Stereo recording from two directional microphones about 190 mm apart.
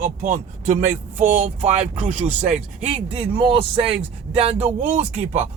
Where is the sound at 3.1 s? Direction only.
30° right (ahead or behind).